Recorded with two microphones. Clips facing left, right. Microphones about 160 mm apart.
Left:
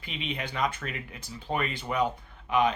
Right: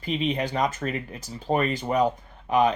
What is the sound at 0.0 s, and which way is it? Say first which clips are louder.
Speech: right 9 dB; 40° right (ahead or behind).